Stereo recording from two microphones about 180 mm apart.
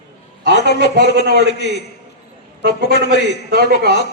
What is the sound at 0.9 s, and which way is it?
Speech, 70° left (ahead or behind).